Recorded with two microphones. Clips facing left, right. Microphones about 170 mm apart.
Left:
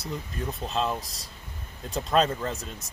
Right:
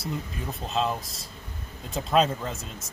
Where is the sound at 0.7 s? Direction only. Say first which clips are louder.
Right 2 dB; centre (ahead or behind).